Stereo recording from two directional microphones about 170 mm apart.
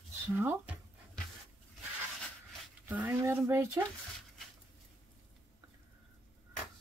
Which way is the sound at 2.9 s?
10° right (ahead or behind).